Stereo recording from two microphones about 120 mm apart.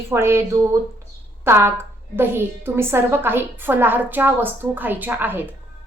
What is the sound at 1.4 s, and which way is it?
A woman's voice, 20° right (ahead or behind).